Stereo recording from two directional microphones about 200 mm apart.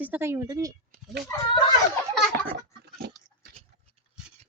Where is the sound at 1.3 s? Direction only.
15° left (ahead or behind).